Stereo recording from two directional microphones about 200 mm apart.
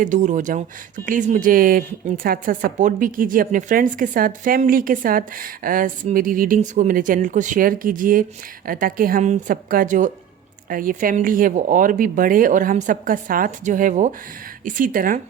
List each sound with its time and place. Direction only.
0.0 s speech: 40° right (ahead or behind)